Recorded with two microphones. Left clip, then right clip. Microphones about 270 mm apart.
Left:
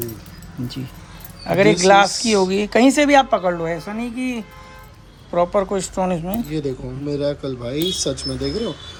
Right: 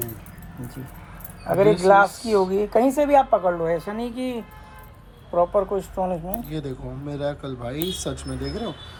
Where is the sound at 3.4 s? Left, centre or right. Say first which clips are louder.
Left 2 dB; left.